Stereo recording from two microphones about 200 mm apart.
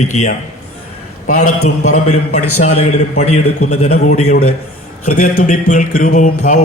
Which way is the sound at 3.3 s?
90° left.